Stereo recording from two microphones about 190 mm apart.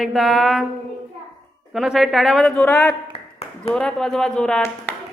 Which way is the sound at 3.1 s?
30° left (ahead or behind).